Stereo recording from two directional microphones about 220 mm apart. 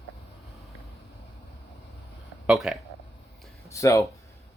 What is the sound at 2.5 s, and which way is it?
Speech, 5° right (ahead or behind).